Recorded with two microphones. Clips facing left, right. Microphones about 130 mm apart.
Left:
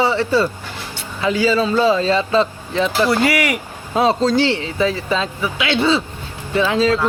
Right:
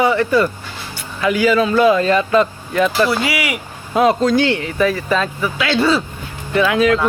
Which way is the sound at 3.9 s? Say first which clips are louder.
Right 2 dB; 30° left (ahead or behind).